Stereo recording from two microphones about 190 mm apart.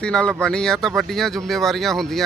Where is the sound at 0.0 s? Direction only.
5° left (ahead or behind).